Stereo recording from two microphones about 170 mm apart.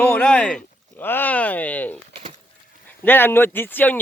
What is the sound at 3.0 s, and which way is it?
Speech, 10° left (ahead or behind).